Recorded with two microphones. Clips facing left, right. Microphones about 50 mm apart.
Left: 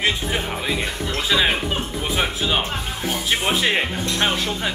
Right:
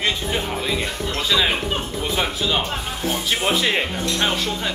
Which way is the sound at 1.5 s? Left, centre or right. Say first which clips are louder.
Even; centre.